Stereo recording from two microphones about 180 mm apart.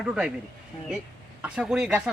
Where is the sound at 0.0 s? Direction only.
5° right (ahead or behind).